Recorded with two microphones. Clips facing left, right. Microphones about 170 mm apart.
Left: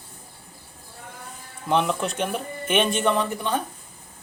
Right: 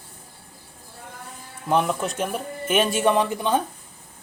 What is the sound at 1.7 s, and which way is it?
Speech, 5° right (ahead or behind).